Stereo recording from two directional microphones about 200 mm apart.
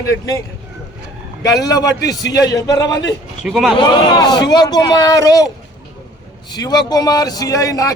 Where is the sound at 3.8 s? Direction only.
20° left (ahead or behind).